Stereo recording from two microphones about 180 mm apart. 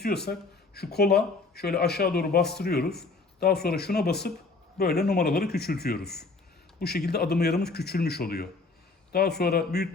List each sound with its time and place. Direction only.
0.0 s speech: 60° left (ahead or behind)